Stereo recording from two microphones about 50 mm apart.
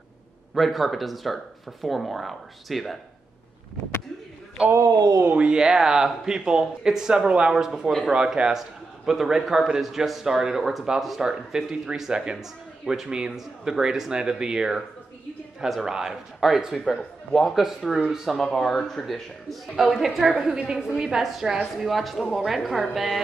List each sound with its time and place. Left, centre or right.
0.6 s speech: centre
4.6 s speech: right; by 20.3 s centre
20.3 s speech: centre